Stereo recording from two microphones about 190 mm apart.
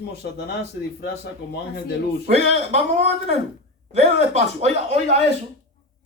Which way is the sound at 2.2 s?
35° right (ahead or behind).